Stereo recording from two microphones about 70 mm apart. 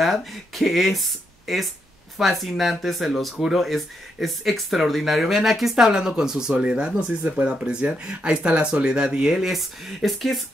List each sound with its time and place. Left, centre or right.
0.0 s speech: centre